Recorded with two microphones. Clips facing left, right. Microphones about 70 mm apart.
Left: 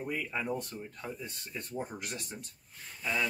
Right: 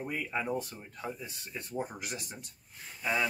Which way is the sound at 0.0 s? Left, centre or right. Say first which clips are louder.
Right 1 dB; centre.